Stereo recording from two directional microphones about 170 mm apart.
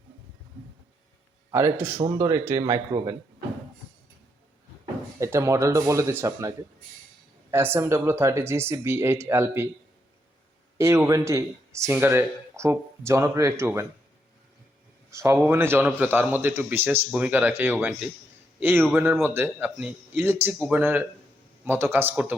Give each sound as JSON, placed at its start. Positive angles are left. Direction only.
{"t": 1.5, "sound": "a man's voice", "side_deg": -15}
{"t": 5.2, "sound": "speech", "side_deg": -15}
{"t": 7.5, "sound": "speech", "side_deg": -15}
{"t": 10.8, "sound": "speech", "side_deg": -15}
{"t": 15.1, "sound": "speech", "side_deg": -15}